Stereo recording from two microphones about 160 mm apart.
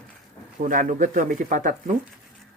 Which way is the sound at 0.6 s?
55° right (ahead or behind).